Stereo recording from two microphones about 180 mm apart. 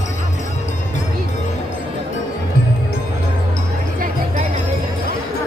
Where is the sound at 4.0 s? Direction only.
40° right (ahead or behind).